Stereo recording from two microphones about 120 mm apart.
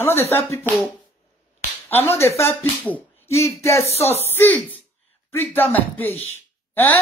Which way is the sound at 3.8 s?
60° left (ahead or behind).